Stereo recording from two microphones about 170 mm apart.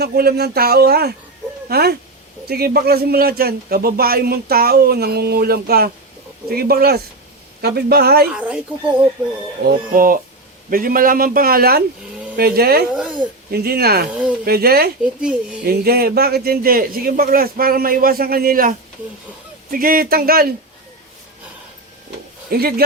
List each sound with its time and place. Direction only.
0.0 s a man's voice: 65° right (ahead or behind)
8.4 s speech: 5° right (ahead or behind)
9.6 s a man's voice: 55° right (ahead or behind)
12.9 s a sound: 5° right (ahead or behind)
13.5 s speech: 65° right (ahead or behind)
14.1 s speech: 5° right (ahead or behind)
14.4 s a man's voice: 65° right (ahead or behind)
15.0 s a child's voice: 5° right (ahead or behind)
15.6 s a man's voice: 65° right (ahead or behind)
22.4 s speech: 65° right (ahead or behind)